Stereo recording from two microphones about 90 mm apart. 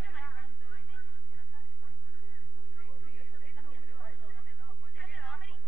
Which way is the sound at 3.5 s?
15° left (ahead or behind).